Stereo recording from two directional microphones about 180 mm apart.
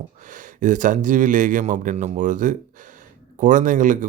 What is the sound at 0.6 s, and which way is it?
Speech, 45° right (ahead or behind).